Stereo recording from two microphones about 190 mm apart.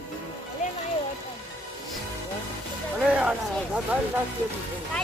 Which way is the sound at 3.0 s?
5° right (ahead or behind).